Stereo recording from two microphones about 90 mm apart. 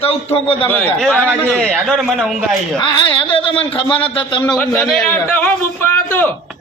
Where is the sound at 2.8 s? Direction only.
60° left (ahead or behind); by 4.4 s 75° left (ahead or behind).